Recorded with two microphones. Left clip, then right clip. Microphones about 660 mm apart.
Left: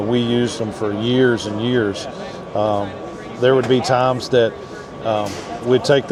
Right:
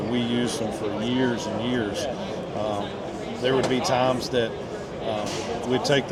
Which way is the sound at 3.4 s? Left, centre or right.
Left.